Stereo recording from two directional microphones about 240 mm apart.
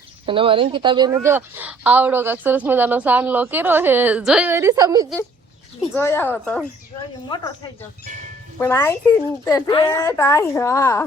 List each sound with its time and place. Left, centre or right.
0.3 s a woman's voice: right
5.8 s speech: centre
7.3 s speech: centre